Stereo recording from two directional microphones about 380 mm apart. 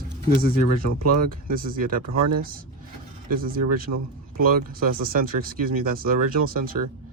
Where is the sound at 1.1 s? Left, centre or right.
Right.